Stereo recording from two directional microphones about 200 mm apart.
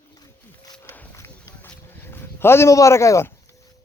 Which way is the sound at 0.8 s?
10° left (ahead or behind).